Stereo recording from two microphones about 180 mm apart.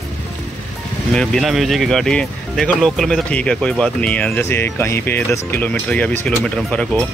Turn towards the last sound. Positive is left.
turn(degrees=5)  # may be behind; listen again after turning